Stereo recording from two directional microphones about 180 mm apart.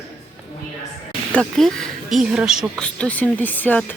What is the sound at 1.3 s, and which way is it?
Speech, 5° left (ahead or behind).